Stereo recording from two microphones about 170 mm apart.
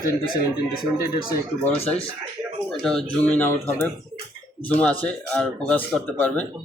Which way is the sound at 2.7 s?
5° left (ahead or behind).